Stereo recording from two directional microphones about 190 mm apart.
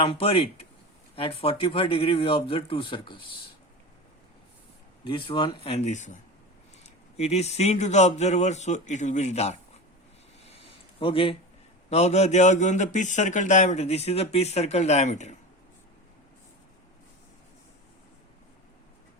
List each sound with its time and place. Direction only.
0.0 s speech: 30° left (ahead or behind)
5.0 s a man's voice: 25° left (ahead or behind)
11.0 s a man's voice: 30° left (ahead or behind)